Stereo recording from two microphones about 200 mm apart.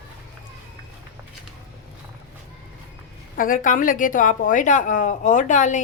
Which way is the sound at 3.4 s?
40° left (ahead or behind).